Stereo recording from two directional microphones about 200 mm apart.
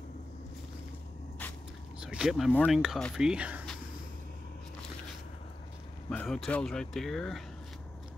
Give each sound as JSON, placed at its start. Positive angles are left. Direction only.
{"t": 1.4, "sound": "a sound", "side_deg": 5}
{"t": 2.0, "sound": "speech", "side_deg": -5}
{"t": 6.0, "sound": "speech", "side_deg": 5}